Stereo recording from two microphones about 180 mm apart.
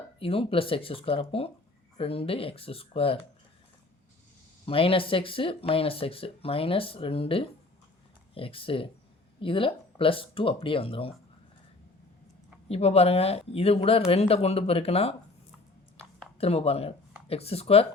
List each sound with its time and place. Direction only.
0.2 s speech: 30° left (ahead or behind)
4.6 s speech: 30° left (ahead or behind)
12.6 s speech: 35° left (ahead or behind)
16.4 s speech: 35° left (ahead or behind)